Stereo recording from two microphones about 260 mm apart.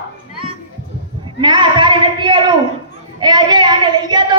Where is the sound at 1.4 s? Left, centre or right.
Centre.